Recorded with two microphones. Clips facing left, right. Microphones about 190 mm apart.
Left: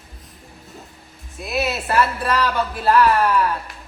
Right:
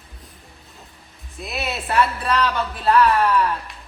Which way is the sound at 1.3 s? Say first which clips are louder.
Left 5 dB; centre (ahead or behind).